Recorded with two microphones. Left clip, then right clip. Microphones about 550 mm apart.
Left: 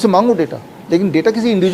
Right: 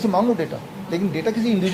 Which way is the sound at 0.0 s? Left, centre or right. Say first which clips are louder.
Left 8 dB; left.